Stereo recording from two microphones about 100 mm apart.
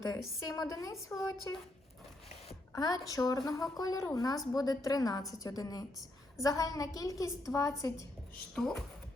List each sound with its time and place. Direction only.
0.3 s a woman's voice: 35° left (ahead or behind)
2.7 s a woman's voice: 40° left (ahead or behind)
8.5 s speech: 5° left (ahead or behind)